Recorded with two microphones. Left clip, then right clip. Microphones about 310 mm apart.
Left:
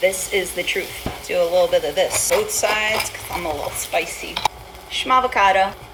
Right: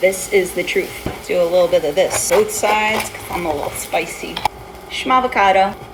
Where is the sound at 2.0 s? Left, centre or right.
Centre.